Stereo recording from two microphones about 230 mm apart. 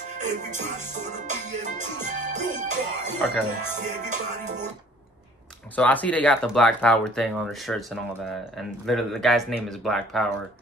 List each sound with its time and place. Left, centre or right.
0.2 s music: right
5.8 s speech: centre